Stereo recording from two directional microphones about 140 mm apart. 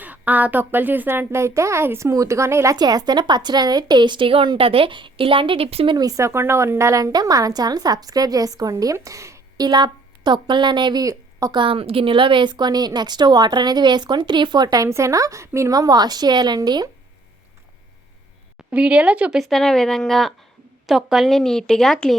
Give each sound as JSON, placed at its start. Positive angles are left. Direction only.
{"t": 0.0, "sound": "a woman's voice", "side_deg": -10}
{"t": 11.6, "sound": "a woman's voice", "side_deg": -40}
{"t": 18.7, "sound": "speech", "side_deg": -10}